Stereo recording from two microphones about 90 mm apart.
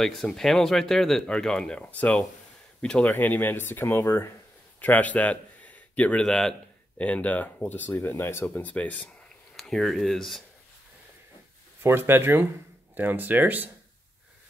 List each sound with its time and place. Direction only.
0.0 s a man's voice: 5° left (ahead or behind)
9.6 s speech: 5° left (ahead or behind)
11.8 s speech: 25° right (ahead or behind)